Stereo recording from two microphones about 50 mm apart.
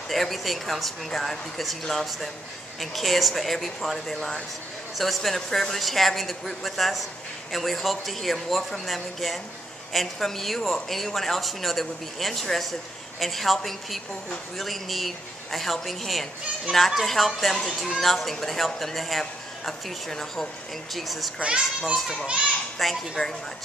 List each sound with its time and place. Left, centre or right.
0.1 s speech: centre
21.4 s a child's voice: centre
22.8 s a child's voice: centre